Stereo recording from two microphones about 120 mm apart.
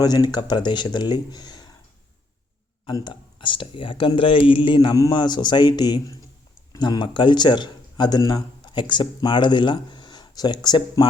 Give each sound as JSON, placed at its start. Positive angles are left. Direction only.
{"t": 0.0, "sound": "speech", "side_deg": 35}
{"t": 2.8, "sound": "speech", "side_deg": 40}
{"t": 4.9, "sound": "speech", "side_deg": 35}